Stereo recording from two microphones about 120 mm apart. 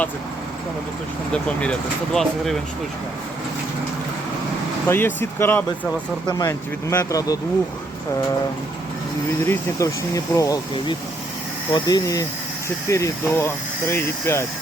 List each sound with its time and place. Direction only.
2.1 s speech: centre (ahead or behind)
4.9 s speech: 20° left (ahead or behind)
6.2 s speech: 30° left (ahead or behind)
9.5 s speech: 25° left (ahead or behind)
11.7 s speech: 35° left (ahead or behind)